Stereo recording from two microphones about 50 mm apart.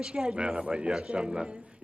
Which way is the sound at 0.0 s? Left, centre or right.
Centre.